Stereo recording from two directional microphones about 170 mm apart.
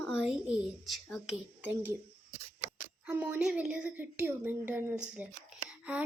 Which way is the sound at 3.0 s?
10° right (ahead or behind).